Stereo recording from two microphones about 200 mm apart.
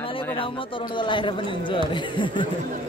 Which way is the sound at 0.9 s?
25° left (ahead or behind).